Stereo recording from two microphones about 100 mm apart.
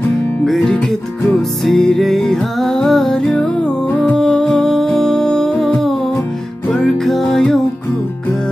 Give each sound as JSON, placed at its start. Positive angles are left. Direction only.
{"t": 0.5, "sound": "music", "side_deg": 5}
{"t": 3.9, "sound": "music", "side_deg": 15}
{"t": 6.7, "sound": "music", "side_deg": 5}